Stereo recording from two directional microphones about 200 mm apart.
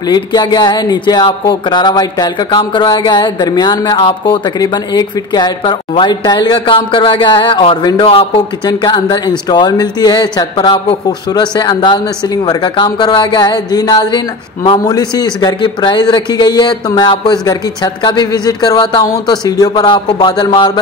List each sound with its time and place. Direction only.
0.1 s speech: 20° left (ahead or behind)